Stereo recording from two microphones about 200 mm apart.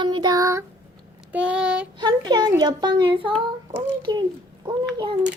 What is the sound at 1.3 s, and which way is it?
Child singing, 5° right (ahead or behind).